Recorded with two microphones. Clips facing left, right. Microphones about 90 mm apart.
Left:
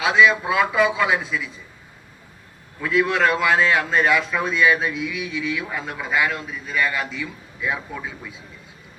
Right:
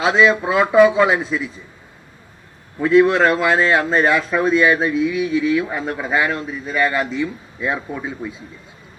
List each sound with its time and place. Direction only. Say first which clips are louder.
0.0 s a man's voice: right 2 dB; 30° right (ahead or behind)
2.8 s a man's voice: right 6 dB; 30° right (ahead or behind)